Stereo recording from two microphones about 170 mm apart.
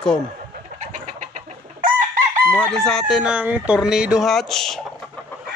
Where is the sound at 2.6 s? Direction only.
5° left (ahead or behind).